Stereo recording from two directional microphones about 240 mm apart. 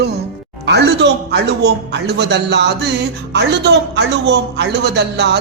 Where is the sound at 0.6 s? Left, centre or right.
Right.